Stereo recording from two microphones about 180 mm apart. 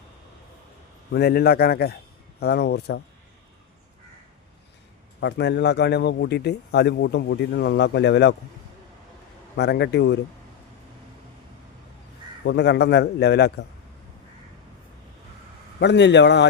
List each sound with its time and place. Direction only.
1.1 s a man's voice: 60° left (ahead or behind)
5.2 s a man's voice: 70° left (ahead or behind)
9.6 s a man's voice: 70° left (ahead or behind)
12.5 s a man's voice: 70° left (ahead or behind)
15.8 s a man's voice: 75° left (ahead or behind)